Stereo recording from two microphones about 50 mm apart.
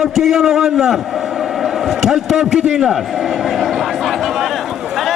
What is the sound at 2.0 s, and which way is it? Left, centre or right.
A man's voice, centre.